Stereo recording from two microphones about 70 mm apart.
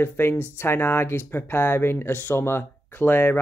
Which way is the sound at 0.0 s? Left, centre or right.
Left.